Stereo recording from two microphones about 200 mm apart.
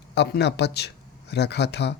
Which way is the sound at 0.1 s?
60° left (ahead or behind).